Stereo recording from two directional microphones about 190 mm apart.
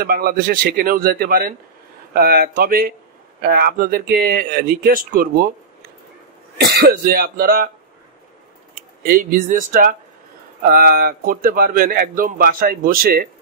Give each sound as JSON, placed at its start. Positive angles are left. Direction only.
{"t": 0.0, "sound": "speech", "side_deg": -50}
{"t": 6.6, "sound": "speech", "side_deg": -55}
{"t": 9.0, "sound": "speech", "side_deg": -45}